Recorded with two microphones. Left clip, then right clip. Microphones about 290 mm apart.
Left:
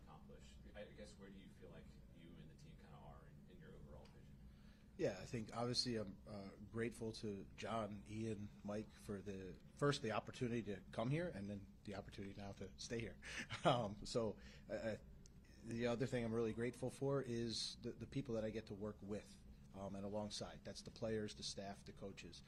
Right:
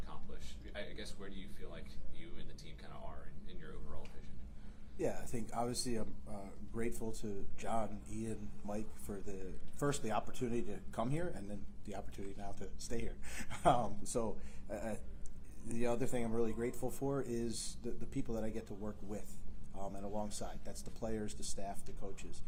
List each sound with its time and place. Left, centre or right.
4.9 s speech: left